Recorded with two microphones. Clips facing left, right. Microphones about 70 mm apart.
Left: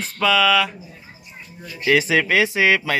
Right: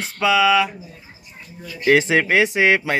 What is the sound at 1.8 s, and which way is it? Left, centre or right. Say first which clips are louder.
Speech: right 2 dB; right.